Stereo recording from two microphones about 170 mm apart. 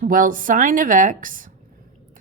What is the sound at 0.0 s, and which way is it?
A woman's voice, 55° right (ahead or behind).